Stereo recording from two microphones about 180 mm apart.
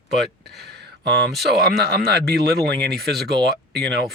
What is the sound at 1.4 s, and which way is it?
Speech, 60° right (ahead or behind).